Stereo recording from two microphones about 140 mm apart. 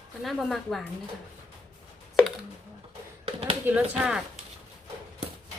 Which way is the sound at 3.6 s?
10° right (ahead or behind).